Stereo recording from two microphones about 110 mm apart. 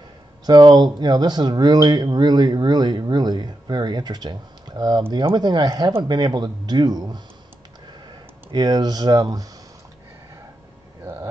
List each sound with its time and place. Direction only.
0.5 s speech: 40° right (ahead or behind)